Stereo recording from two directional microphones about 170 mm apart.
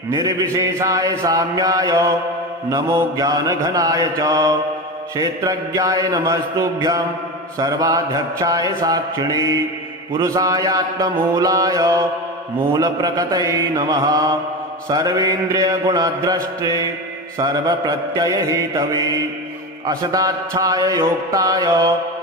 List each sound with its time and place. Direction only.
0.1 s mantra: 20° right (ahead or behind)